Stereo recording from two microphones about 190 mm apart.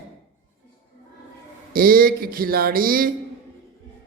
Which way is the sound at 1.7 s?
50° right (ahead or behind).